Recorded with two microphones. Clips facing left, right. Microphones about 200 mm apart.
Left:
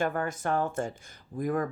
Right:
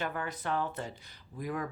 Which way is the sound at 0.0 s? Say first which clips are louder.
Left 6 dB; 45° left (ahead or behind).